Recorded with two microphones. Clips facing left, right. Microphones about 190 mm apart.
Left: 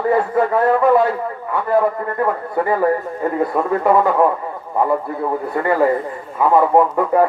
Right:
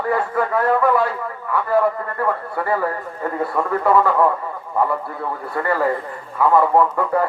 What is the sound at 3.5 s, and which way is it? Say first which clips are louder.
Speech: even; 20° left (ahead or behind).